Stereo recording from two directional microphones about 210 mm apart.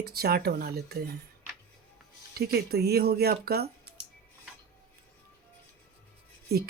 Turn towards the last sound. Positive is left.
turn(degrees=-50)  # may be behind; listen again after turning